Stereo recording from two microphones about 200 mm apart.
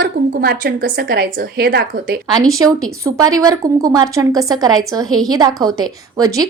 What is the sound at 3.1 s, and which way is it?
A woman's voice, 20° right (ahead or behind).